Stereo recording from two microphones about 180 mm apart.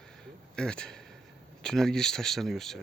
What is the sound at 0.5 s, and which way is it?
Speech, 5° left (ahead or behind).